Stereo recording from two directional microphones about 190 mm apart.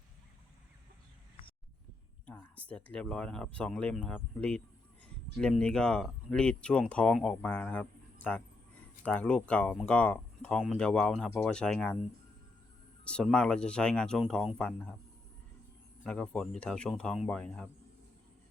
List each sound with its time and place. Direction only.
2.2 s a sound: 5° left (ahead or behind)
2.6 s speech: 5° left (ahead or behind)
13.1 s speech: 5° left (ahead or behind)
16.0 s speech: 5° left (ahead or behind)